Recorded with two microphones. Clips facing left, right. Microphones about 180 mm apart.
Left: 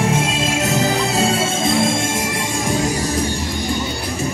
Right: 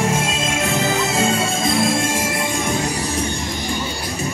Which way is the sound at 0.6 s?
35° left (ahead or behind).